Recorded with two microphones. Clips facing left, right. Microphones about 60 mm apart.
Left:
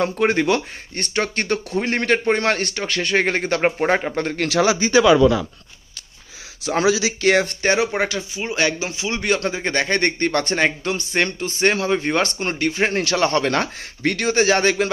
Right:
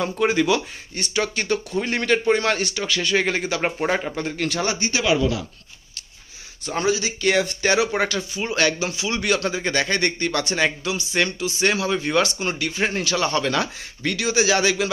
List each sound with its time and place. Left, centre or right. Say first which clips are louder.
0.2 s speech: even; left
4.2 s speech: left 5 dB; left
6.6 s speech: left 4 dB; left
7.6 s speech: left 1 dB; left
12.9 s speech: left 3 dB; left